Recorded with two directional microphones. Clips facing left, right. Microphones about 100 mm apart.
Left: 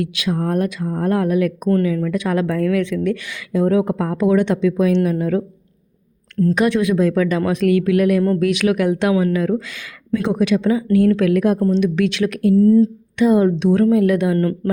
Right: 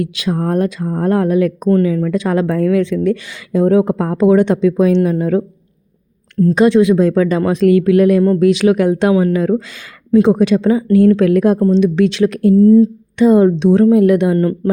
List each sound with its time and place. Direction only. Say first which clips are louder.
0.0 s a woman's voice: right 3 dB; 35° right (ahead or behind)
6.5 s a woman's voice: right 7 dB; 30° right (ahead or behind)
12.5 s speech: right 4 dB; 15° right (ahead or behind)
13.1 s a woman's voice: right 5 dB; 30° right (ahead or behind)